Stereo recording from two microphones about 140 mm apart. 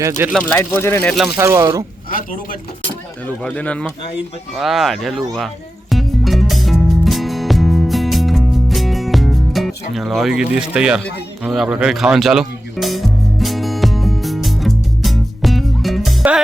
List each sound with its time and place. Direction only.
0.3 s speech: 10° left (ahead or behind)
1.4 s speech: 20° right (ahead or behind)
2.0 s speech: 85° left
3.2 s speech: 10° left (ahead or behind)
5.9 s music: centre (ahead or behind)
9.9 s speech: centre (ahead or behind)
11.4 s music: centre (ahead or behind)